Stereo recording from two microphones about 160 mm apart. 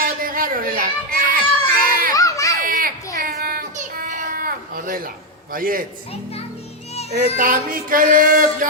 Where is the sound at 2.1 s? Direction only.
20° left (ahead or behind).